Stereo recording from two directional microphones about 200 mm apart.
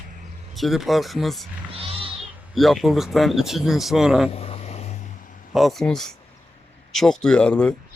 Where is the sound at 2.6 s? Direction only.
Centre (ahead or behind).